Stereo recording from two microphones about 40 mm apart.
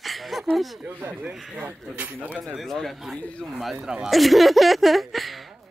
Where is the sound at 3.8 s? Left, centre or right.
Centre.